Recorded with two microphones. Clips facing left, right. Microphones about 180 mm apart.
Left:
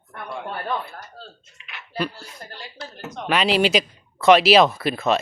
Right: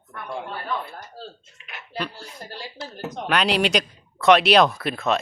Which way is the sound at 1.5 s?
50° right (ahead or behind).